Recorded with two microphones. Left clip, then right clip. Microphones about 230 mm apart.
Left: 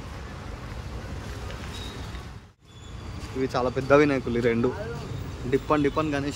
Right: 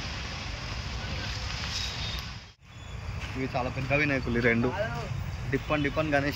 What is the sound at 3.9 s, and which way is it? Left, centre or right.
Speech, centre.